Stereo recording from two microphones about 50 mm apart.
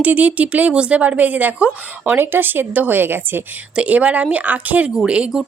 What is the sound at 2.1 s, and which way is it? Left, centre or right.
Speech, right.